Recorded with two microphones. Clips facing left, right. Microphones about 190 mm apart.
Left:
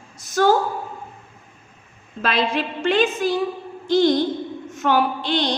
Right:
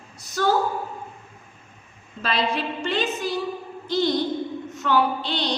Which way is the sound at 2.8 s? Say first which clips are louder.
Left 9 dB; 50° left (ahead or behind).